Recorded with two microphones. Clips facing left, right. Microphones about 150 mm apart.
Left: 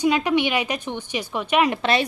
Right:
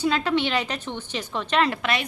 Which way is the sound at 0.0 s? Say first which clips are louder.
Left 3 dB; 15° left (ahead or behind).